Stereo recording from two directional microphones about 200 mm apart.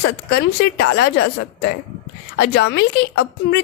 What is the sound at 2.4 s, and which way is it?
A woman's voice, 55° left (ahead or behind).